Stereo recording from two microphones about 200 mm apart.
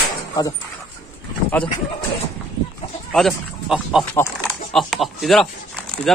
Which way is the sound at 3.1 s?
Centre (ahead or behind).